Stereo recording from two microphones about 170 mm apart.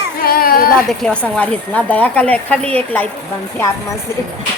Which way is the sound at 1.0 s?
5° left (ahead or behind).